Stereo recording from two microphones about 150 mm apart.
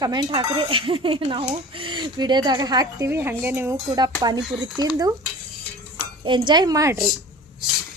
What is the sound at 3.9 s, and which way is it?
Speech, 25° right (ahead or behind).